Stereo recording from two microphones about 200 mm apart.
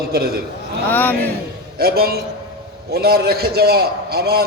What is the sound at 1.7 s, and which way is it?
A man's voice, 50° right (ahead or behind).